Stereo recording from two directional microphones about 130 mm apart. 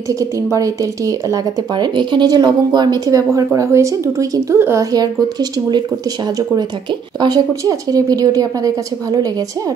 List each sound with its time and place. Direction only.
0.2 s a woman's voice: 25° right (ahead or behind)
4.9 s speech: 30° right (ahead or behind)
7.2 s a woman's voice: 30° right (ahead or behind)